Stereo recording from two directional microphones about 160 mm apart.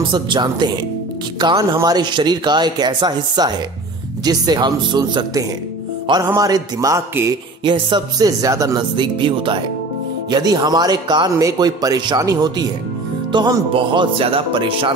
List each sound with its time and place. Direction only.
0.0 s speech: 30° right (ahead or behind)